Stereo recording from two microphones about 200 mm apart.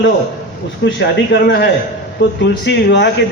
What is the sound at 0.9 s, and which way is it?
A man's voice, 60° left (ahead or behind).